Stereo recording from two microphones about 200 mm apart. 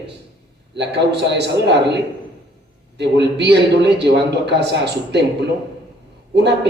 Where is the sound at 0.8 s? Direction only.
60° right (ahead or behind).